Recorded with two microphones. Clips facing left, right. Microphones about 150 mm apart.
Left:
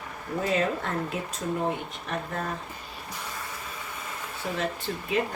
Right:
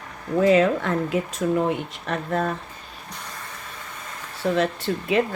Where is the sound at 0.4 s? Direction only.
85° right.